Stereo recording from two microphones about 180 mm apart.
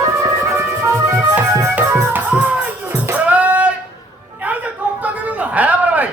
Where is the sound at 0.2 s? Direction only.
15° right (ahead or behind).